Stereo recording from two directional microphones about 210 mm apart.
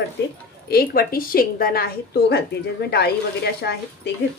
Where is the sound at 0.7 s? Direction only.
45° left (ahead or behind).